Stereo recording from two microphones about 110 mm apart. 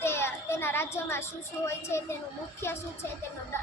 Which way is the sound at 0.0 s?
20° left (ahead or behind).